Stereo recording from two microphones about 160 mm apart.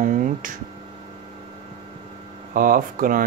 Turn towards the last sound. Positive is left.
turn(degrees=-60)  # may be behind; listen again after turning